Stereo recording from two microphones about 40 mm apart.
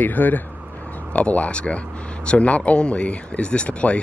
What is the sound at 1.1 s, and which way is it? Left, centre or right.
Speech, left.